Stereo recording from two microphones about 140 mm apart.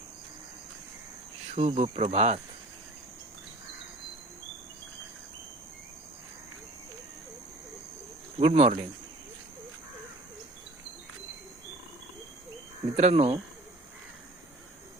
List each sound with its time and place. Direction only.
1.5 s speech: 50° right (ahead or behind)
8.4 s speech: 45° right (ahead or behind)
13.0 s speech: 50° right (ahead or behind)